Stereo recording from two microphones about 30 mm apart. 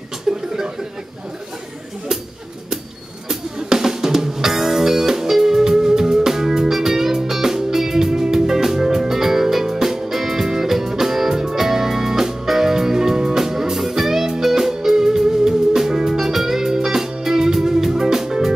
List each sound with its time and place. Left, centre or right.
0.3 s chuckle: centre
3.3 s drum: centre
8.1 s music: centre